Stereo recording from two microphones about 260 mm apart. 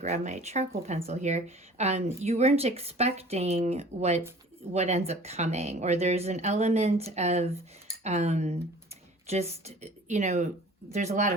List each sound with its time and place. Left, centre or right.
0.0 s speech: right